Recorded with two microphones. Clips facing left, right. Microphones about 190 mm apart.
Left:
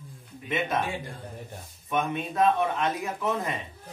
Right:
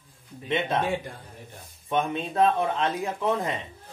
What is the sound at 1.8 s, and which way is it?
Speech, 30° right (ahead or behind).